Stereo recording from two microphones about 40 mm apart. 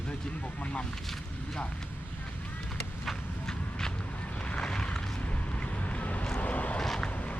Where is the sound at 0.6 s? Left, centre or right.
Left.